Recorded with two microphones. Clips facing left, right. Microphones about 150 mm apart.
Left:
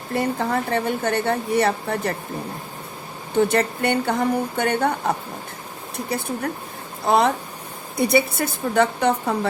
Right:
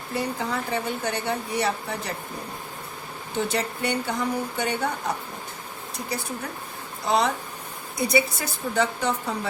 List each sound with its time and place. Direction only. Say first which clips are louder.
0.1 s speech: left 6 dB; 55° left (ahead or behind)
3.5 s speech: left 6 dB; 55° left (ahead or behind)
7.1 s speech: left 5 dB; 55° left (ahead or behind)